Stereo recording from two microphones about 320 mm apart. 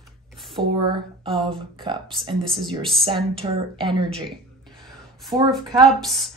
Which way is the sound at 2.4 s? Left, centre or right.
Centre.